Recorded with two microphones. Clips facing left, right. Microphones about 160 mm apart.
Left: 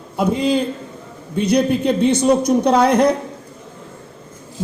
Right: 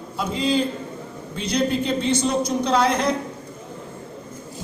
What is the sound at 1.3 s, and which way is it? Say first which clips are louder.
A woman's voice: left 6 dB; 60° left (ahead or behind).